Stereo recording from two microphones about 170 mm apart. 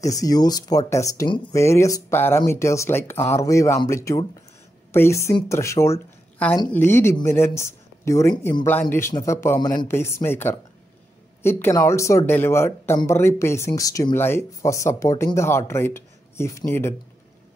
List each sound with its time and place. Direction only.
0.0 s speech: 20° left (ahead or behind)